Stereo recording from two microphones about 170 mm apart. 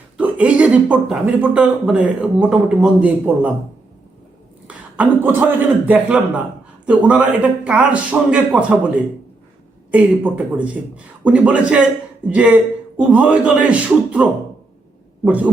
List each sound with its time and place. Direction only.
0.2 s speech: 10° right (ahead or behind)
4.7 s speech: 10° right (ahead or behind)
9.9 s speech: 10° right (ahead or behind)